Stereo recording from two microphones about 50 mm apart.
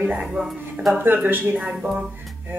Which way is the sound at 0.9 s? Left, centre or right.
Right.